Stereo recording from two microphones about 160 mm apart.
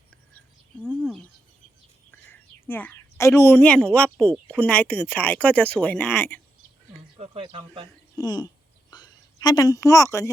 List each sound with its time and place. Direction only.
2.6 s a woman's voice: 10° left (ahead or behind)
7.2 s speech: 35° right (ahead or behind)
8.1 s a sound: 25° left (ahead or behind)